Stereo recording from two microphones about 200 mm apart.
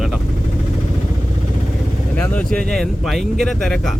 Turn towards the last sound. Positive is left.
turn(degrees=0)  # may be behind; listen again after turning